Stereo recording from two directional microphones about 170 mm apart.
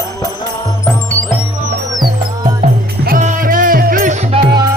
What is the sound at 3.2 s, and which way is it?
Music, 50° right (ahead or behind).